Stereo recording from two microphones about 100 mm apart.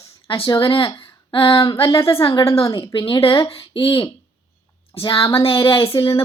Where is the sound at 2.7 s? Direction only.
50° left (ahead or behind).